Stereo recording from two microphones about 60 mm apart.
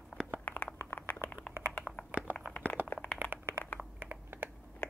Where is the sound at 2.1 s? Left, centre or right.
Right.